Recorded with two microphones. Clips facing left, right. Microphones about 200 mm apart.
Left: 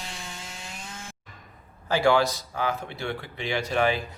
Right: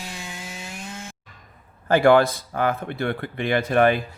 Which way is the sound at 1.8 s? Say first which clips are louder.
Right 6 dB; 55° right (ahead or behind).